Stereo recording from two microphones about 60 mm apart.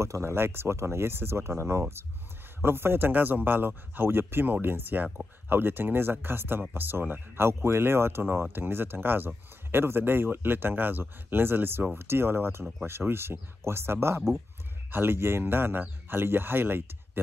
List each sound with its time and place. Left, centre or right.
0.0 s speech: right